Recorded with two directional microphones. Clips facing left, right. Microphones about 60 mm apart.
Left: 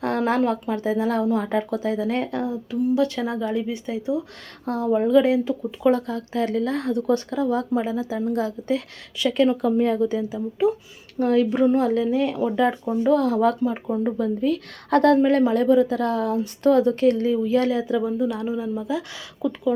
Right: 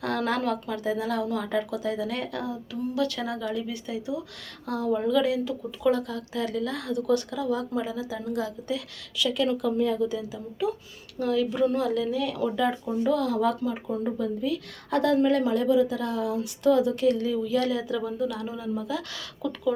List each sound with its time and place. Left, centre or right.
0.0 s a woman's voice: left
10.3 s speech: left
11.2 s a woman's voice: left